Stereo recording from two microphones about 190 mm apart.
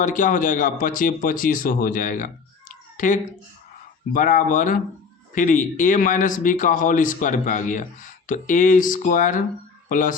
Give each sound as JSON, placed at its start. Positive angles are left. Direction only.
{"t": 0.0, "sound": "speech", "side_deg": 45}